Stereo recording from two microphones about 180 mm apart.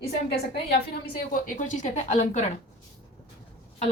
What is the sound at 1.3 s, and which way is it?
A woman's voice, 45° left (ahead or behind).